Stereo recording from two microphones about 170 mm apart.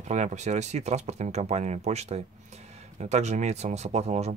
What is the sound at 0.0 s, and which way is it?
Speech, 45° right (ahead or behind).